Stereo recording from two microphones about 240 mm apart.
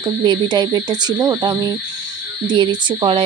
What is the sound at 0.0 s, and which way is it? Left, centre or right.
Speech, centre.